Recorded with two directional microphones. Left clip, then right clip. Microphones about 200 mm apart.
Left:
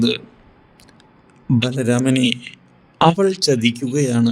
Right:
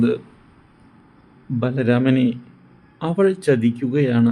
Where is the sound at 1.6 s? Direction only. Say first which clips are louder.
Right 1 dB; centre (ahead or behind).